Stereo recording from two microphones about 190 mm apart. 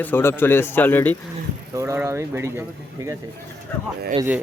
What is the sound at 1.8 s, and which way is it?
Speech, 15° right (ahead or behind).